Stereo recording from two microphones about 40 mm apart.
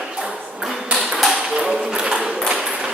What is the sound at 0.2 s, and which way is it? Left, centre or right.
Ping, centre.